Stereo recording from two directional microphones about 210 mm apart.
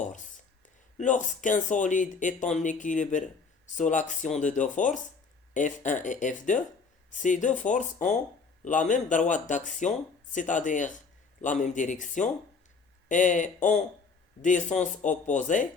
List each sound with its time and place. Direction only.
0.9 s speech: 35° left (ahead or behind)